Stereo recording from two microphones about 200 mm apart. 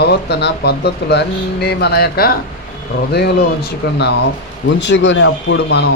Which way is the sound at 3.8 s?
55° left (ahead or behind).